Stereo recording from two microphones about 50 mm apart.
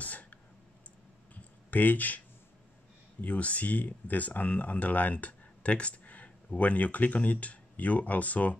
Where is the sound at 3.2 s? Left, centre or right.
Left.